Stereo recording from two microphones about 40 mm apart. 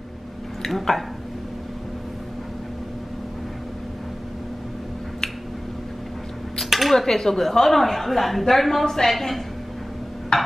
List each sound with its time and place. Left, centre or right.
0.7 s speech: centre
6.5 s speech: centre
10.3 s a sound: centre